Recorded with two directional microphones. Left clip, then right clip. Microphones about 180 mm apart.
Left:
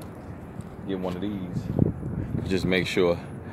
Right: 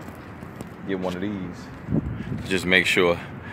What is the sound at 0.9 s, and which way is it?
Speech, 35° right (ahead or behind).